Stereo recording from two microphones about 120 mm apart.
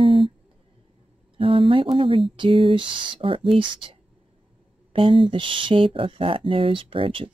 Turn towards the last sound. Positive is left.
turn(degrees=-45)  # may be behind; listen again after turning